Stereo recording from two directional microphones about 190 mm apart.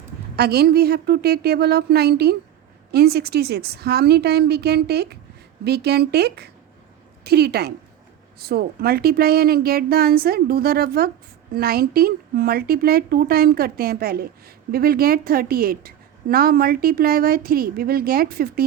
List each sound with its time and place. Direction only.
0.3 s a woman's voice: 55° right (ahead or behind)